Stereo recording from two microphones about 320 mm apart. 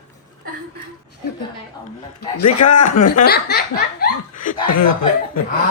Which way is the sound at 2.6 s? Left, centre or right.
Left.